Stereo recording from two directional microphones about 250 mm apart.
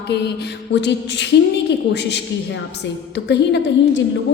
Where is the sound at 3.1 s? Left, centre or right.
Left.